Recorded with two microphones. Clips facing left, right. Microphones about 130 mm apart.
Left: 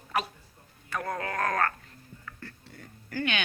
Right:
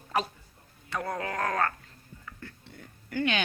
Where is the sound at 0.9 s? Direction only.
15° right (ahead or behind).